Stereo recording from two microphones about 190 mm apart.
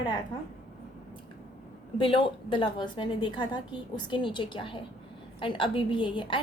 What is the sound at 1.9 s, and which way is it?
A woman's voice, 30° left (ahead or behind).